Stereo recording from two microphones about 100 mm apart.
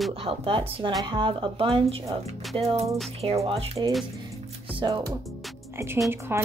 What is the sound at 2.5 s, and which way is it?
Music, 90° right.